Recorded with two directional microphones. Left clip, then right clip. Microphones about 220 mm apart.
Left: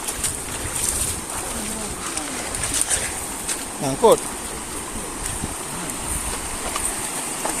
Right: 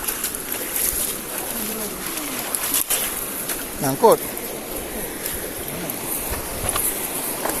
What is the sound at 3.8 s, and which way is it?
Speech, 15° right (ahead or behind).